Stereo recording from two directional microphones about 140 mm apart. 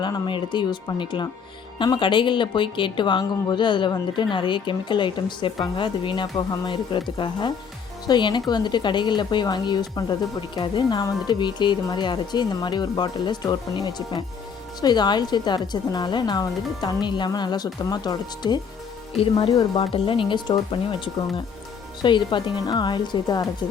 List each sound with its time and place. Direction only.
0.0 s speech: 35° left (ahead or behind)
19.1 s speech: 40° left (ahead or behind)